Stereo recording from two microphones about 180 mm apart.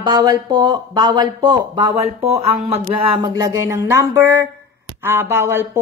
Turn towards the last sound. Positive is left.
turn(degrees=-15)  # may be behind; listen again after turning